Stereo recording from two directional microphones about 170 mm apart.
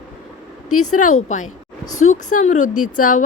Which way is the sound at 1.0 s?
45° left (ahead or behind).